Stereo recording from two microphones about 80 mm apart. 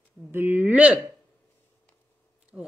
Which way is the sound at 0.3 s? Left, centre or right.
Right.